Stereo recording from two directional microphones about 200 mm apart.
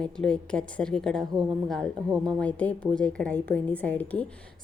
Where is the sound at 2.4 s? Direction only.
5° left (ahead or behind).